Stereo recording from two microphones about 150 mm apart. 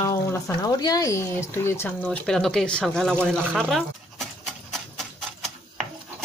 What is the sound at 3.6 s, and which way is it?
Pant, centre (ahead or behind).